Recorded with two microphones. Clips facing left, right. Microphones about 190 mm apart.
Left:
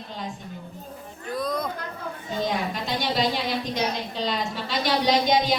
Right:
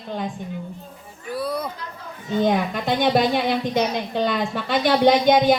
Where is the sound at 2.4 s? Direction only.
55° right (ahead or behind).